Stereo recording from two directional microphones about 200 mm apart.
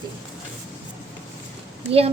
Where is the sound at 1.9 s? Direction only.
30° right (ahead or behind).